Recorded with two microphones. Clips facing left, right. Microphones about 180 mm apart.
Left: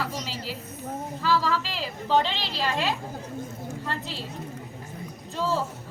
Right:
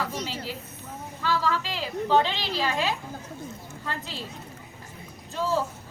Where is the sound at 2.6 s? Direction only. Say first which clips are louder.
Left 3 dB; centre (ahead or behind).